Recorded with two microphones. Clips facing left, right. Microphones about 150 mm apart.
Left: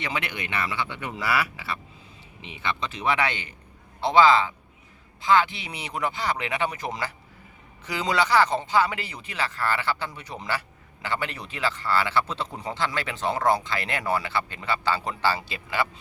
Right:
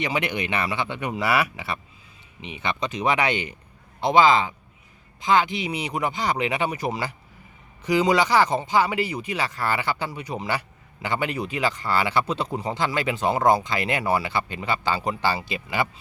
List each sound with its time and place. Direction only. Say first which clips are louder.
0.0 s speech: right 5 dB; 15° right (ahead or behind)